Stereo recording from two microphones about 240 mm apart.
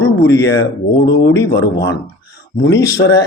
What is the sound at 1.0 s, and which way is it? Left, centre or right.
Speech, left.